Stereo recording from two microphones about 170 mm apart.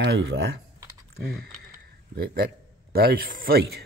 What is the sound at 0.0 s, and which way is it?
Speech, 90° right.